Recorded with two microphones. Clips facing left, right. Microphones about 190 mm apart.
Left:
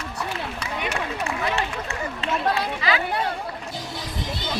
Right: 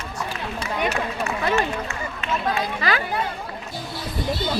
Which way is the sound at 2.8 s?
50° right (ahead or behind).